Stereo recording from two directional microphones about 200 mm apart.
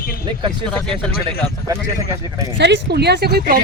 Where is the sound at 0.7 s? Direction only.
5° left (ahead or behind).